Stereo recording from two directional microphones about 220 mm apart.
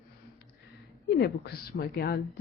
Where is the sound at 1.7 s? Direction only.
45° left (ahead or behind).